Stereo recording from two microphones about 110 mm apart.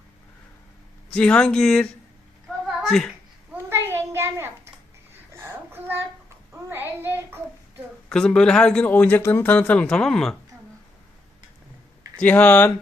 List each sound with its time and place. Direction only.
1.1 s speech: 10° left (ahead or behind)
2.6 s a sound: centre (ahead or behind)
3.5 s a sound: 20° right (ahead or behind)
6.7 s child singing: 20° right (ahead or behind)
8.1 s speech: 5° left (ahead or behind)
12.2 s speech: 15° left (ahead or behind)